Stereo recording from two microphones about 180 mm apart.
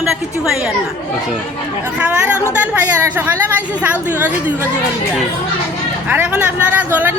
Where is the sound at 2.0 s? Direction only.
5° right (ahead or behind).